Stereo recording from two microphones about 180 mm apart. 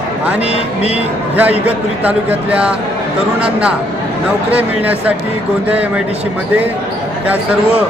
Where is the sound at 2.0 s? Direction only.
5° right (ahead or behind).